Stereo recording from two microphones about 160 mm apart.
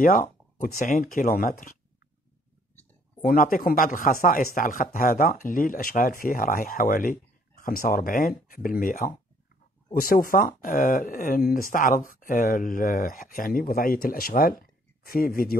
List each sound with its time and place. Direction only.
0.0 s speech: 55° left (ahead or behind)
3.2 s speech: 60° left (ahead or behind)